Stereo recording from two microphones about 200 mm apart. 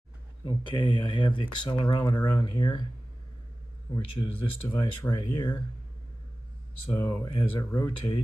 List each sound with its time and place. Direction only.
0.5 s speech: 25° left (ahead or behind)
3.9 s speech: 15° left (ahead or behind)
7.0 s speech: 15° left (ahead or behind)